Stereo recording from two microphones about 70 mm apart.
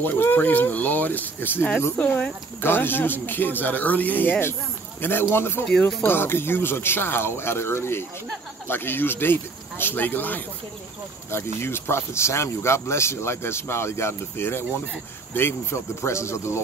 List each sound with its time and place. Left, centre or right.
0.0 s speech: left
5.7 s speech: centre
6.0 s speech: left